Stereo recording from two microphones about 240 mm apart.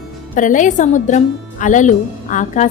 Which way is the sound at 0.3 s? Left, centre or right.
Left.